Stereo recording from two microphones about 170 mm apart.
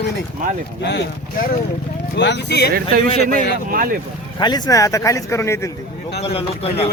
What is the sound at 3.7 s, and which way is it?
Speech, 55° right (ahead or behind).